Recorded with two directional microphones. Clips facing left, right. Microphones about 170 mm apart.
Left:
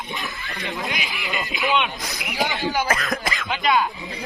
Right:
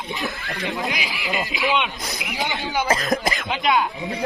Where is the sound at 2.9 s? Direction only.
30° right (ahead or behind).